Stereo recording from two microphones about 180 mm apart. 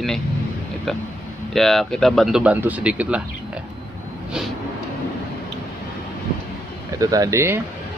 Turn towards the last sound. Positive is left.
turn(degrees=-15)  # may be behind; listen again after turning